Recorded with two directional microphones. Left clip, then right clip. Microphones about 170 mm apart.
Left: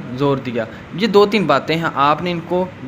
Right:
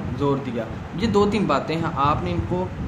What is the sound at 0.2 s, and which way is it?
Speech, 35° left (ahead or behind).